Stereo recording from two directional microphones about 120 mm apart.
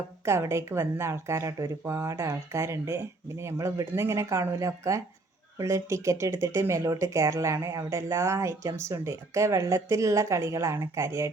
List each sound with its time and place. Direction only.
0.3 s speech: 20° right (ahead or behind)